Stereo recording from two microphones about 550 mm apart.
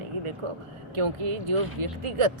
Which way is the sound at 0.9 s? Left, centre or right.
Right.